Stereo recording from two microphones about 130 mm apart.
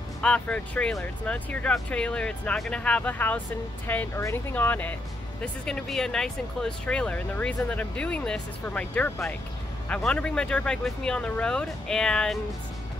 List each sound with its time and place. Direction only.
0.2 s speech: 10° left (ahead or behind)